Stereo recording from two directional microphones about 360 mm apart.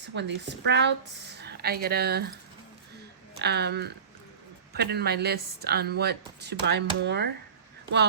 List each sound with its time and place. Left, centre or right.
0.1 s speech: right
3.3 s speech: right